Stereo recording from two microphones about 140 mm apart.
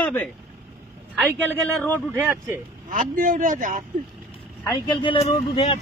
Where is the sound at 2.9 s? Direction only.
75° right (ahead or behind).